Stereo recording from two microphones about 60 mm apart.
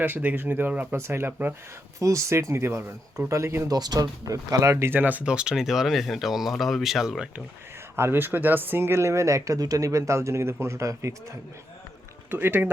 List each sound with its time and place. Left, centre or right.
0.0 s speech: right
0.9 s speech: right
2.0 s speech: right
3.2 s speech: right
3.7 s speech: right
4.7 s speech: right
4.9 s speech: right
5.2 s speech: centre
7.9 s speech: right
12.3 s speech: right